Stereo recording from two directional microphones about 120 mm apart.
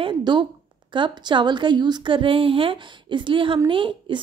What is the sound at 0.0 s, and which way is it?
A woman's voice, 35° right (ahead or behind).